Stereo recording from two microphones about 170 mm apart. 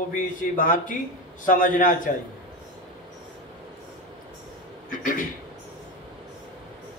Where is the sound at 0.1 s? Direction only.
50° left (ahead or behind).